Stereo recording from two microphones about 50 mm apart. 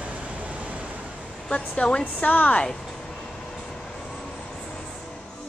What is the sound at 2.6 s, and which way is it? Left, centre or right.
Speech, centre.